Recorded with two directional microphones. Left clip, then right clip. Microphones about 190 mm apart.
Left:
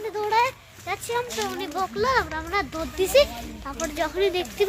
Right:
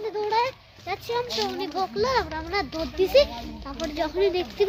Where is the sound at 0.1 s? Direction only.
10° right (ahead or behind).